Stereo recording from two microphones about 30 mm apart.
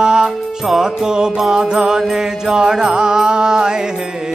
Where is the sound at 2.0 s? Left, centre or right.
Centre.